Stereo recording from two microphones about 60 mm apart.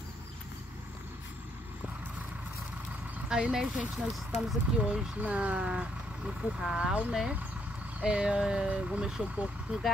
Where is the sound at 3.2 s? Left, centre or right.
Centre.